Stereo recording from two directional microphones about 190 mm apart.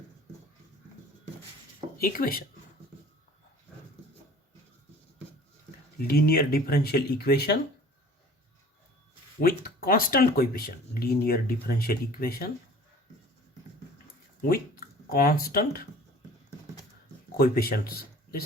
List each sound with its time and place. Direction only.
2.0 s speech: 50° left (ahead or behind)
6.0 s speech: 55° left (ahead or behind)
9.4 s speech: 50° left (ahead or behind)
14.5 s speech: 50° left (ahead or behind)
17.3 s speech: 55° left (ahead or behind)